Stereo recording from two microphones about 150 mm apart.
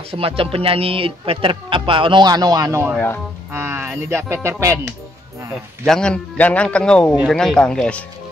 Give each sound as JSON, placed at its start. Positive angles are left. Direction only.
{"t": 0.1, "sound": "speech", "side_deg": -40}
{"t": 5.9, "sound": "a man's voice", "side_deg": 5}